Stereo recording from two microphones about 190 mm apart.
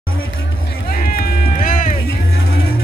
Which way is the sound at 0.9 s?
50° left (ahead or behind).